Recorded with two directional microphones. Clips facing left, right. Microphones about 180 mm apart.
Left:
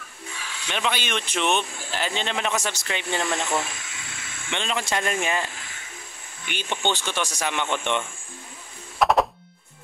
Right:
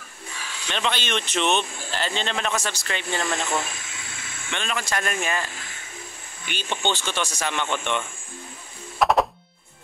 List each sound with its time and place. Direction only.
0.7 s speech: 10° left (ahead or behind)
6.5 s speech: 15° left (ahead or behind)
9.0 s music: centre (ahead or behind)